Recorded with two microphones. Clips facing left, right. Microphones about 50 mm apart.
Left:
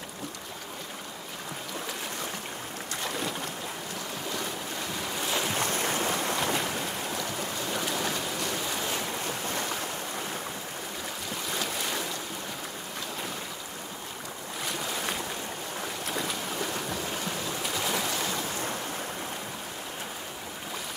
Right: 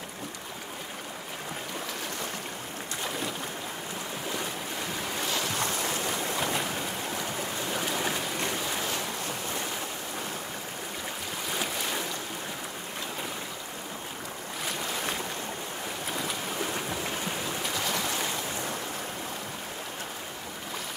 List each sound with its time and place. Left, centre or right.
3.0 s boat: centre
5.3 s boat: centre
5.7 s boat: left
6.4 s boat: centre
7.2 s boat: right
7.7 s stream: centre
8.5 s waves: centre
8.8 s waves: centre
11.5 s boat: centre
14.8 s boat: centre
16.6 s boat: centre